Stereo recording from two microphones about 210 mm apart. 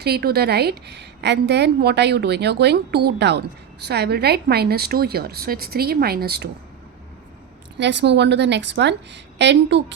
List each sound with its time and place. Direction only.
0.0 s a woman's voice: 50° right (ahead or behind)
7.8 s a woman's voice: 55° right (ahead or behind)